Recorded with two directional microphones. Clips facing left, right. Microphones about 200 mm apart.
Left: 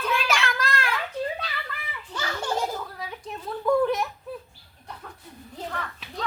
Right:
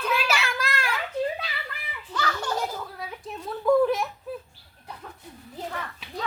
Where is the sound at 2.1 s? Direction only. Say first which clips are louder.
Right 1 dB; 25° left (ahead or behind).